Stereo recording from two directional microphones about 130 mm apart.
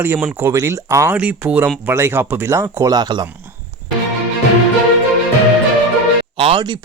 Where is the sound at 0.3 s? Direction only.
25° right (ahead or behind).